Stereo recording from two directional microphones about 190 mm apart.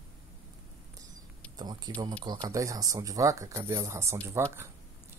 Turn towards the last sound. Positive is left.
turn(degrees=-15)  # may be behind; listen again after turning